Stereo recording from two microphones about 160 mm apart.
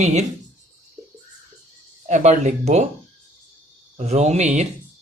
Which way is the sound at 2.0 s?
50° right (ahead or behind).